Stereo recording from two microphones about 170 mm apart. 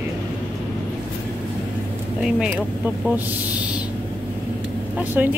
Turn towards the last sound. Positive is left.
turn(degrees=-10)  # may be behind; listen again after turning